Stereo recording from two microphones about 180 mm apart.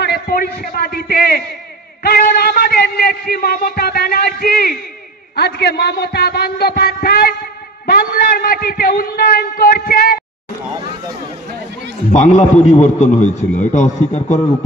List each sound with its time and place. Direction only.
0.0 s a man's voice: 60° left (ahead or behind)
12.1 s a man's voice: 40° left (ahead or behind)